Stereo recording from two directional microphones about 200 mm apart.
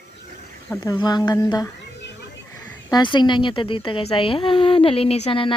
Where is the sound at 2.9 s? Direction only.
20° left (ahead or behind).